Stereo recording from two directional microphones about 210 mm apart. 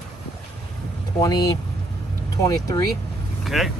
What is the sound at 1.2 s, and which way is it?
Speech, 15° left (ahead or behind).